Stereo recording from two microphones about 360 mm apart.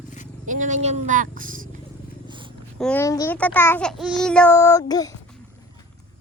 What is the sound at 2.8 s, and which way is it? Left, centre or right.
A child's voice, centre.